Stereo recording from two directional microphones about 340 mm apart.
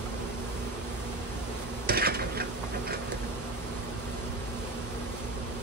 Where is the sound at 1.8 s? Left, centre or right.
Right.